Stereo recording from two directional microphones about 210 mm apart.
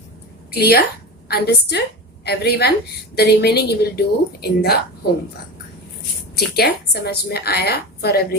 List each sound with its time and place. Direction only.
0.5 s a woman's voice: 50° left (ahead or behind)
6.3 s a woman's voice: 50° left (ahead or behind)